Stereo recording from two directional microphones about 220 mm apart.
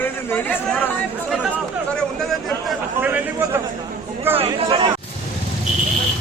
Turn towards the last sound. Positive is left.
turn(degrees=-25)  # may be behind; listen again after turning